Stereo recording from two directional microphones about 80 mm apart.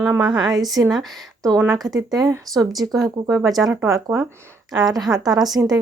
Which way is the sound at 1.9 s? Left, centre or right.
Right.